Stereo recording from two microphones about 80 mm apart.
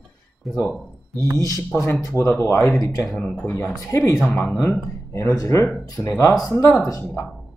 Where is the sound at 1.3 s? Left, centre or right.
Left.